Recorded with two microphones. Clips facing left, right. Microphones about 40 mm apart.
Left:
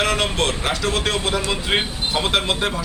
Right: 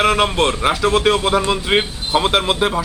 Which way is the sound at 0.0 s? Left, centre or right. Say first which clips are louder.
Right 5 dB; centre.